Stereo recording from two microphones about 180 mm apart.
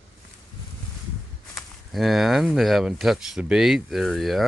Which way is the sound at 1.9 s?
Centre (ahead or behind).